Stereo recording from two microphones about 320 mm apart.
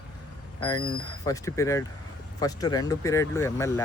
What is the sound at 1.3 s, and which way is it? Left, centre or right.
Speech, centre.